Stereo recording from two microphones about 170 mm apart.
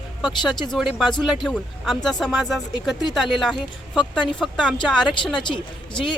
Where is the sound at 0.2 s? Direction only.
Centre (ahead or behind).